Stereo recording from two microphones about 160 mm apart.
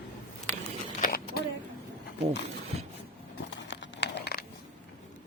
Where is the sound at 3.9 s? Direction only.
90° left.